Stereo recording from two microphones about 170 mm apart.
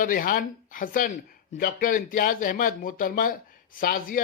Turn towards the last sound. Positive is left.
turn(degrees=55)  # may be behind; listen again after turning